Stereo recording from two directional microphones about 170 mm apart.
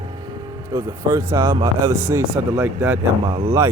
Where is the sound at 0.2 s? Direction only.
25° right (ahead or behind).